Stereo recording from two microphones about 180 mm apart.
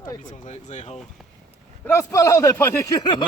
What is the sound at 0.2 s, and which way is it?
Speech, 45° left (ahead or behind).